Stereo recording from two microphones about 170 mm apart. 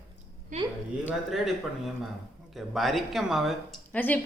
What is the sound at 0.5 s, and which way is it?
Speech, 45° right (ahead or behind).